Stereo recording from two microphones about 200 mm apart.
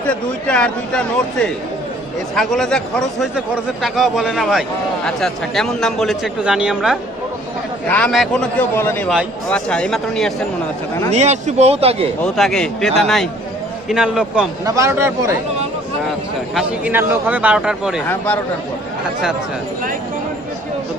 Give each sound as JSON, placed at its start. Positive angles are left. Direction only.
{"t": 0.0, "sound": "a man's voice", "side_deg": 5}
{"t": 11.2, "sound": "speech", "side_deg": -35}
{"t": 12.2, "sound": "speech", "side_deg": 5}
{"t": 14.6, "sound": "a man's voice", "side_deg": -15}
{"t": 16.6, "sound": "a man's voice", "side_deg": -10}